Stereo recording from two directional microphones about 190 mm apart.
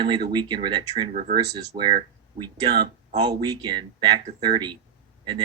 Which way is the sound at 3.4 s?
25° right (ahead or behind).